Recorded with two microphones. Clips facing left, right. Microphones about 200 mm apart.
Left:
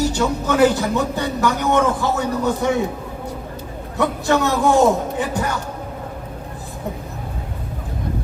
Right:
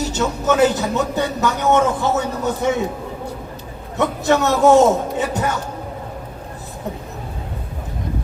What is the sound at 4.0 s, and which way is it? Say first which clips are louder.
A man's voice: right 1 dB; 20° right (ahead or behind).